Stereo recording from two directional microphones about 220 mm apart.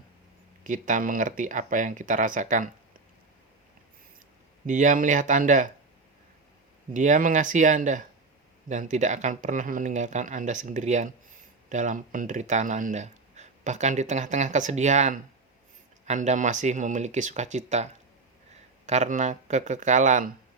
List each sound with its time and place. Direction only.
0.6 s speech: 35° right (ahead or behind)
4.6 s speech: 35° right (ahead or behind)
6.9 s speech: 35° right (ahead or behind)
18.9 s speech: 35° right (ahead or behind)